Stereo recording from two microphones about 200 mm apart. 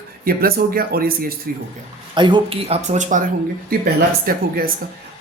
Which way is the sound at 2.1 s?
25° right (ahead or behind).